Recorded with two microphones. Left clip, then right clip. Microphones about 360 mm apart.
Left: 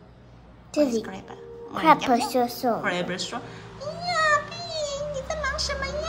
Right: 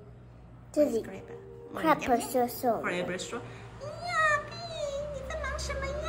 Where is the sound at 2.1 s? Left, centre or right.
Left.